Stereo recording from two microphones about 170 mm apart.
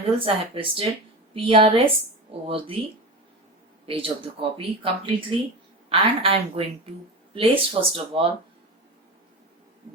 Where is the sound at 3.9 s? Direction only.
35° right (ahead or behind).